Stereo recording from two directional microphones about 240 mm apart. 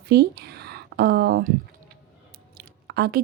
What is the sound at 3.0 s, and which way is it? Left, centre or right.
Speech, right.